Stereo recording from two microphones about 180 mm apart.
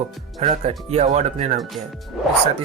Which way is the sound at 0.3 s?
35° right (ahead or behind).